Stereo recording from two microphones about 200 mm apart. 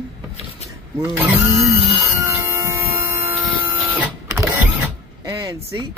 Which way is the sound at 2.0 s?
15° right (ahead or behind).